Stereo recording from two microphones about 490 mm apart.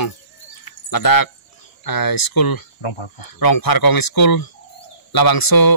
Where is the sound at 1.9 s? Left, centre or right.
Left.